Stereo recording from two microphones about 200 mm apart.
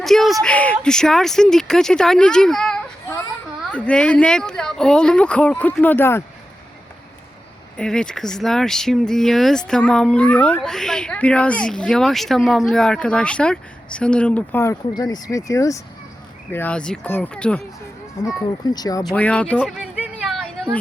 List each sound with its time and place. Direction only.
0.0 s speech: centre (ahead or behind)
7.8 s speech: 5° left (ahead or behind)
18.6 s speech: 20° left (ahead or behind)
19.0 s a sound: 5° left (ahead or behind)